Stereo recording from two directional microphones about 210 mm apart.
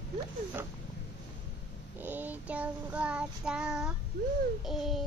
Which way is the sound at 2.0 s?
10° right (ahead or behind).